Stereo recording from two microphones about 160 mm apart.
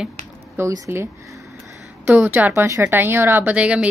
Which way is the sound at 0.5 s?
15° right (ahead or behind).